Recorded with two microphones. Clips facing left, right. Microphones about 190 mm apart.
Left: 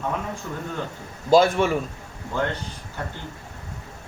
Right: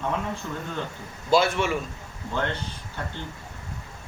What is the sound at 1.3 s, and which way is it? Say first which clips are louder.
Speech: left 5 dB; 40° left (ahead or behind).